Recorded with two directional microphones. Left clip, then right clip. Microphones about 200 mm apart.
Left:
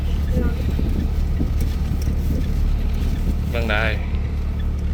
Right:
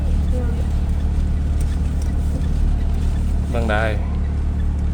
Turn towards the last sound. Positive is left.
turn(degrees=-25)  # may be behind; listen again after turning